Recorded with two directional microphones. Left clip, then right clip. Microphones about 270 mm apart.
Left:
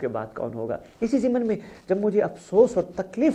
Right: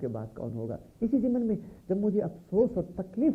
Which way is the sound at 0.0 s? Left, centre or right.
Centre.